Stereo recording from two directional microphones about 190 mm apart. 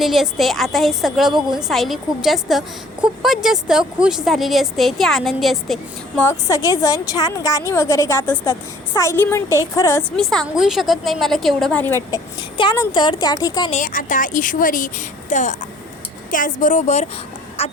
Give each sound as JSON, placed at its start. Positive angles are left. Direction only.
{"t": 0.0, "sound": "a woman's voice", "side_deg": 0}
{"t": 6.2, "sound": "a woman's voice", "side_deg": 15}
{"t": 10.0, "sound": "a woman's voice", "side_deg": 0}
{"t": 12.4, "sound": "speech", "side_deg": 25}
{"t": 13.7, "sound": "a woman's voice", "side_deg": 40}